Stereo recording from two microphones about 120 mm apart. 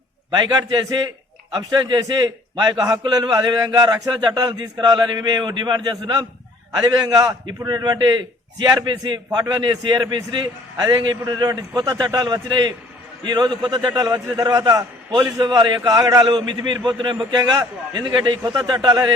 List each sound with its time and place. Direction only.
0.3 s a man's voice: 35° right (ahead or behind)